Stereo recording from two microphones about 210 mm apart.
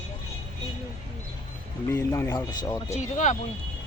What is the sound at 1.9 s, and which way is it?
Speech, 15° left (ahead or behind).